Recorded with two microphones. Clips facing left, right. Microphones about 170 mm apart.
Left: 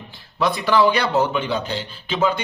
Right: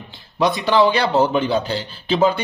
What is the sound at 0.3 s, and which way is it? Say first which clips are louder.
Speech: right 2 dB; 20° right (ahead or behind).